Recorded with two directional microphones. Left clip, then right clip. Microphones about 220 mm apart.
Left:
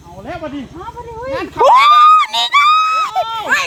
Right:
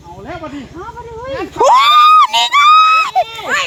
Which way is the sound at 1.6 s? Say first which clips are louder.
Even; 15° right (ahead or behind).